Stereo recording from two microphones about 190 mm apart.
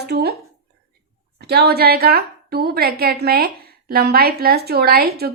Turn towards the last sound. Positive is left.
turn(degrees=-55)  # may be behind; listen again after turning